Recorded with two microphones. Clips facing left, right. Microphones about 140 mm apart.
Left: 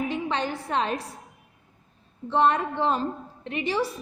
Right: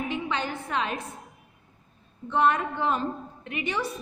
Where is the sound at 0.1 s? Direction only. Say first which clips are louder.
Left 2 dB; 35° left (ahead or behind).